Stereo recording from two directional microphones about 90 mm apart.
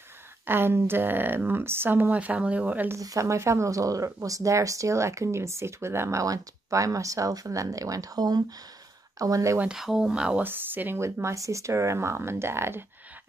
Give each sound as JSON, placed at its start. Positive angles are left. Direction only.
{"t": 0.5, "sound": "speech", "side_deg": -25}
{"t": 3.0, "sound": "speech", "side_deg": -40}
{"t": 9.7, "sound": "speech", "side_deg": -5}
{"t": 10.4, "sound": "speech", "side_deg": -20}